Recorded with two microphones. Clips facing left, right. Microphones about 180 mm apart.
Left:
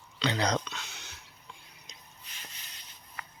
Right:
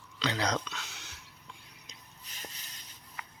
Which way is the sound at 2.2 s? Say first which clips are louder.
Right 5 dB; 40° right (ahead or behind).